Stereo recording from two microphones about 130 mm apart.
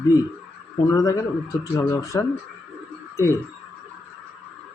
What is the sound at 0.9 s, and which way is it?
Speech, 30° left (ahead or behind).